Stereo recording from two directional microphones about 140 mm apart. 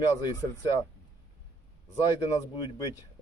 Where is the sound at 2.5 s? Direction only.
30° left (ahead or behind).